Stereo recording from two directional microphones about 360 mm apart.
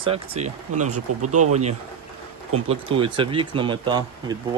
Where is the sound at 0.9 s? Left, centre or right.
Right.